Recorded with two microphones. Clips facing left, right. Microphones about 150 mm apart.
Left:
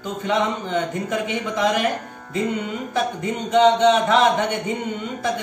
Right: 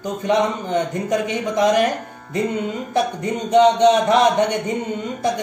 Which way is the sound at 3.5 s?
40° right (ahead or behind).